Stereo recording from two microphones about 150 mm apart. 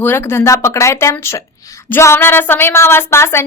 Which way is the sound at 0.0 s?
15° left (ahead or behind).